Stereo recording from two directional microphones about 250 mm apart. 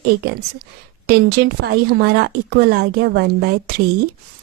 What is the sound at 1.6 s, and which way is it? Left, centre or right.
Speech, right.